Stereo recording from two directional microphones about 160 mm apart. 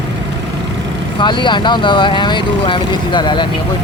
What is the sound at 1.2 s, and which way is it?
Speech, 30° left (ahead or behind).